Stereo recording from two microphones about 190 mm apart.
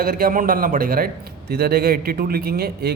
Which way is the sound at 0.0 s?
50° right (ahead or behind).